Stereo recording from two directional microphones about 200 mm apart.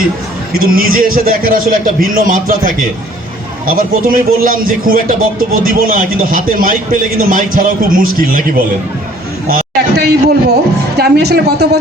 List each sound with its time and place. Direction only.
0.6 s speech: 45° right (ahead or behind)
9.5 s a sound: 50° right (ahead or behind)
10.5 s speech: 55° right (ahead or behind)